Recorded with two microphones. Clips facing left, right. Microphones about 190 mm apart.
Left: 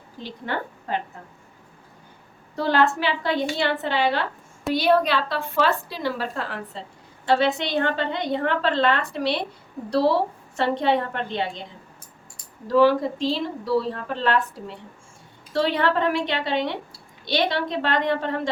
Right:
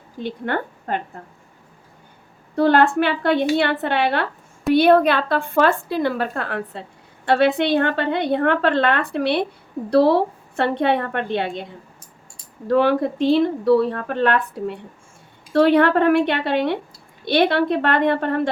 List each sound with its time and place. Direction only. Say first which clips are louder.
0.2 s a woman's voice: right 5 dB; 55° right (ahead or behind)
2.6 s a woman's voice: right 6 dB; 55° right (ahead or behind)
12.6 s a woman's voice: right 1 dB; 60° right (ahead or behind)